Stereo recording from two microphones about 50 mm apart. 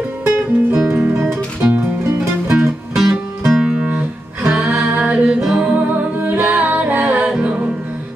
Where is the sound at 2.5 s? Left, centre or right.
Centre.